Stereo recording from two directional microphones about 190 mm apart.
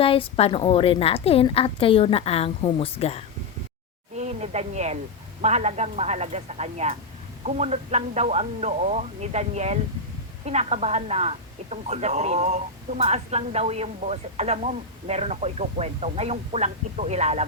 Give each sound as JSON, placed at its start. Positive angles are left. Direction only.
{"t": 0.0, "sound": "a woman's voice", "side_deg": 30}
{"t": 4.2, "sound": "a woman's voice", "side_deg": -35}